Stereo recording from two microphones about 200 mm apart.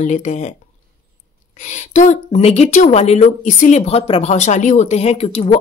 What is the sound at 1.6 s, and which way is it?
Speech, 35° left (ahead or behind).